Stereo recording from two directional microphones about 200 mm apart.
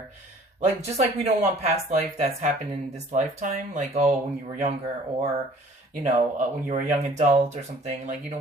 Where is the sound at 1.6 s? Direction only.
35° right (ahead or behind).